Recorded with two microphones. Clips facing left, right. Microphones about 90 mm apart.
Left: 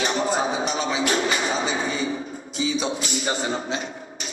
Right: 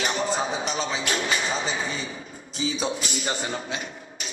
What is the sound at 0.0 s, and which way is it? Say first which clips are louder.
Music: left 3 dB; 35° left (ahead or behind).